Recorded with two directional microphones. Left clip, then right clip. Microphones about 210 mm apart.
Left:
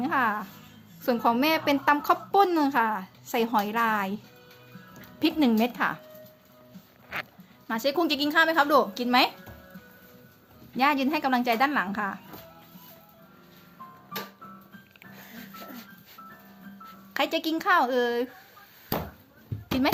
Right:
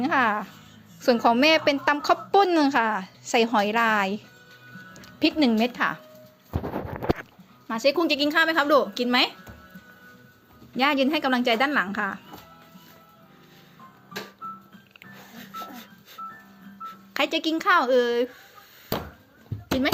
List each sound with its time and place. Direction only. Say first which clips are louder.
0.0 s a woman's voice: right 3 dB; 15° right (ahead or behind)
4.9 s music: right 3 dB; 5° right (ahead or behind)
5.5 s a woman's voice: right 2 dB; centre (ahead or behind)
7.7 s a woman's voice: right 4 dB; centre (ahead or behind)
10.8 s a woman's voice: right 2 dB; 5° right (ahead or behind)
17.2 s a woman's voice: right 2 dB; centre (ahead or behind)